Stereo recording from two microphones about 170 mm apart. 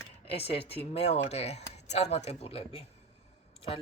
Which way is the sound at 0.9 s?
40° left (ahead or behind).